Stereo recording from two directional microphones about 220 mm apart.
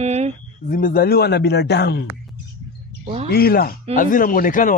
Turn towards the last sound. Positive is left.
turn(degrees=40)  # may be behind; listen again after turning